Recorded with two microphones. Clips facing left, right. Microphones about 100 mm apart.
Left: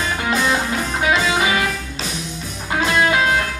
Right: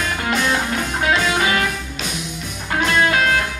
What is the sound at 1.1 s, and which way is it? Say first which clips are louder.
Music: even; 20° left (ahead or behind).